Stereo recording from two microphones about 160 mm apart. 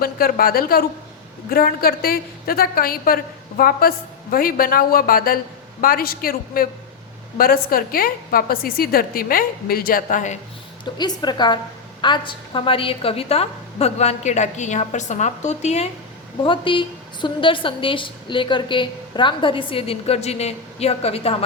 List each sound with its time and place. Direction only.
0.0 s a woman's voice: 65° left (ahead or behind)
10.9 s a woman's voice: 25° left (ahead or behind); by 15.9 s 45° left (ahead or behind)
16.4 s a woman's voice: 30° left (ahead or behind)